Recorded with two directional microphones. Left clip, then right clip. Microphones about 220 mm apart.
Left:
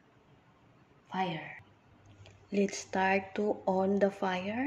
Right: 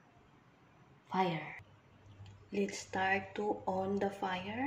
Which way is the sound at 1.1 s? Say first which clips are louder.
Even; 15° right (ahead or behind).